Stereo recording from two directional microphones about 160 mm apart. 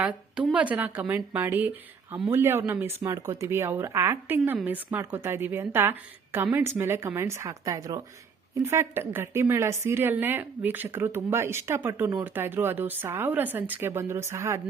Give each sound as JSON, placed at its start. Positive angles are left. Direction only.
{"t": 0.0, "sound": "a woman's voice", "side_deg": -10}